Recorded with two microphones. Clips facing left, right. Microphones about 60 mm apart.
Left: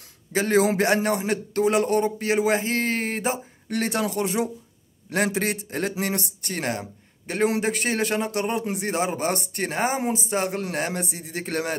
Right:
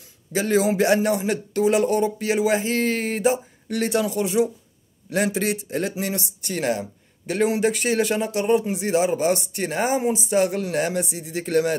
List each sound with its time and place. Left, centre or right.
0.3 s a man's voice: left